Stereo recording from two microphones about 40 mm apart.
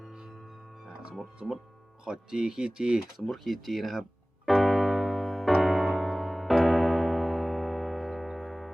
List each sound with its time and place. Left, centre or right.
1.4 s speech: centre
3.2 s speech: centre
4.4 s music: centre
5.5 s piano: centre